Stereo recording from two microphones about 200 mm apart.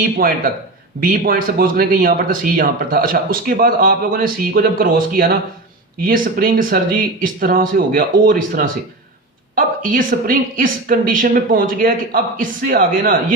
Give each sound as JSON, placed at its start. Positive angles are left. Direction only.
{"t": 0.2, "sound": "speech", "side_deg": -45}